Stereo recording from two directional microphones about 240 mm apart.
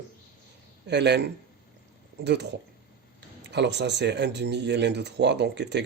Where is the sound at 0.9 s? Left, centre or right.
Right.